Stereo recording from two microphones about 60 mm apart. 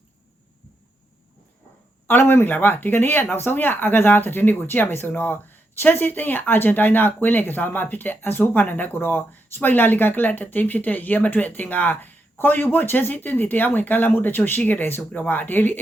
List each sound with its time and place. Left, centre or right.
2.0 s speech: left